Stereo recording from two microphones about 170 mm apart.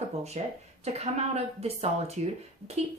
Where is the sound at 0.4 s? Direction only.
40° right (ahead or behind).